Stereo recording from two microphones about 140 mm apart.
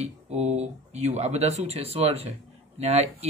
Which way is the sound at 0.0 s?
55° right (ahead or behind).